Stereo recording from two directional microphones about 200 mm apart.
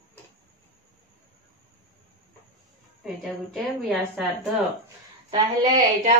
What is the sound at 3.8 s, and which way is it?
Speech, centre (ahead or behind).